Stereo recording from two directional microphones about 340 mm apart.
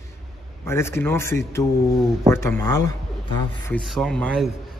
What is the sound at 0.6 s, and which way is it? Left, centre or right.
A man's voice, centre.